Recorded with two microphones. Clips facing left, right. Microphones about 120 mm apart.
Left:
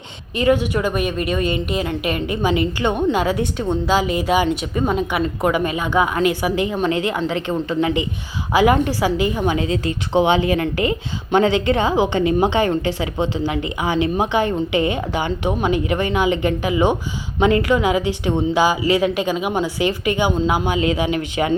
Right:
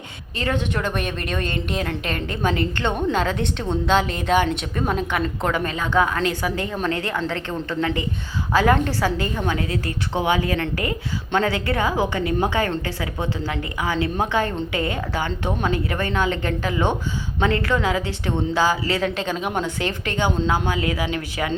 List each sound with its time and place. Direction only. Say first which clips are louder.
0.3 s a woman's voice: left 7 dB; 10° left (ahead or behind)